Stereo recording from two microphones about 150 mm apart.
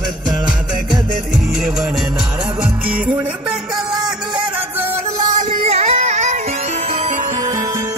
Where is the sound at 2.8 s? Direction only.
10° right (ahead or behind).